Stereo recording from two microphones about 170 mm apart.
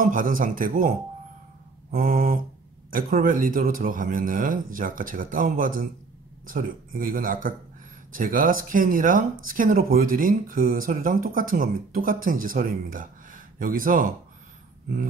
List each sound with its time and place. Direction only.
0.0 s a man's voice: 55° right (ahead or behind)